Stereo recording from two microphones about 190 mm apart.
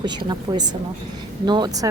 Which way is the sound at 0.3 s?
20° right (ahead or behind).